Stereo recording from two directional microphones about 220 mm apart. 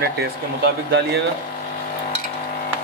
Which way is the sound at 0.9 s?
50° right (ahead or behind).